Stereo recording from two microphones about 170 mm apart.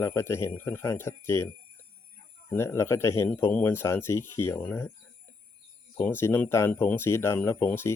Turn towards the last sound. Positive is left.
turn(degrees=15)  # may be behind; listen again after turning